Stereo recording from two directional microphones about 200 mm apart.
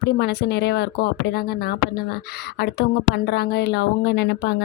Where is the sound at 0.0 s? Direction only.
55° left (ahead or behind).